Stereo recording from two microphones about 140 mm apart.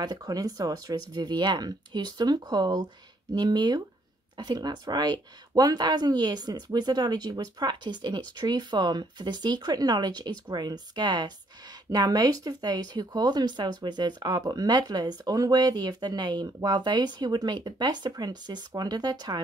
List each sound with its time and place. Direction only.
0.0 s speech: 25° right (ahead or behind)